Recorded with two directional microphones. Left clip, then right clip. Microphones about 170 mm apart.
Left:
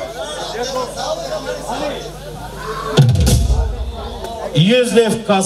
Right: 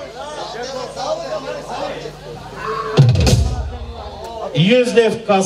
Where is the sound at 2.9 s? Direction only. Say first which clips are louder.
Left 1 dB; 30° left (ahead or behind).